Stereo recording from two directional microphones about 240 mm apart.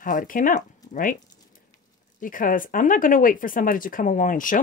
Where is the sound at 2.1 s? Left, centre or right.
Left.